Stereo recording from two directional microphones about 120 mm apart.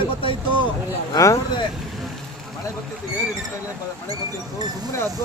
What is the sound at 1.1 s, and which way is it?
Speech, 25° left (ahead or behind).